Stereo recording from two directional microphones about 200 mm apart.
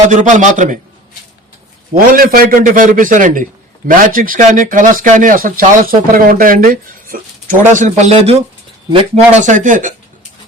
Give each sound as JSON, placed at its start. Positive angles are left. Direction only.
{"t": 0.1, "sound": "speech", "side_deg": -40}
{"t": 1.9, "sound": "speech", "side_deg": -45}